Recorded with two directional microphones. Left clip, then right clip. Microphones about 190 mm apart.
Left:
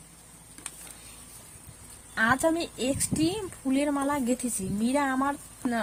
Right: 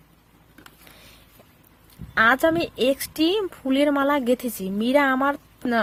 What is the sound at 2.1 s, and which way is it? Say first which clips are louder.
A woman's voice: right 6 dB; 45° right (ahead or behind).